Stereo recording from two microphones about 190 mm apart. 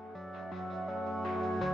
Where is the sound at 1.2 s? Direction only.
Centre (ahead or behind).